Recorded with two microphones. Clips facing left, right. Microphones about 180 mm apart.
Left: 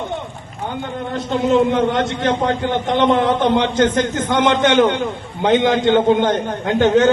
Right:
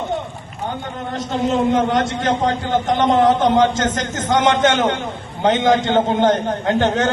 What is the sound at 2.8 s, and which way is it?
A man's voice, 45° right (ahead or behind).